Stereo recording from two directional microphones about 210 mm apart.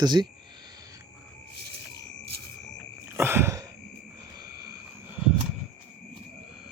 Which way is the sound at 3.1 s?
10° right (ahead or behind).